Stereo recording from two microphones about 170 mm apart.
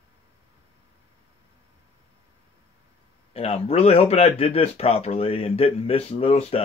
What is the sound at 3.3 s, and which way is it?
Speech, 35° left (ahead or behind).